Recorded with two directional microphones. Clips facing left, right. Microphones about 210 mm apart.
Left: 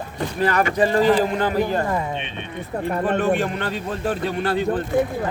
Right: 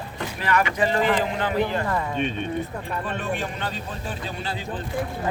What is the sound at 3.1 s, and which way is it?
Speech, 60° left (ahead or behind).